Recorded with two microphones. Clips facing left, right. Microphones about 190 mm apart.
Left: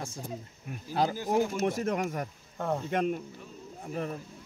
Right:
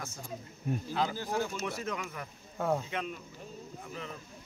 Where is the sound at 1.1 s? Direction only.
15° left (ahead or behind).